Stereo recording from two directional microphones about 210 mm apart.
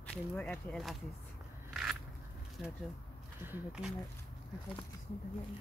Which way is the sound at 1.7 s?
Centre (ahead or behind).